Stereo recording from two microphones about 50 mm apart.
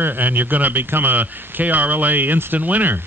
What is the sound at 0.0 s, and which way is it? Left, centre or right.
Speech, right.